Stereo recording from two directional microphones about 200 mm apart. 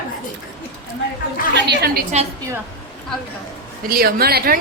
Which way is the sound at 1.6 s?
55° right (ahead or behind).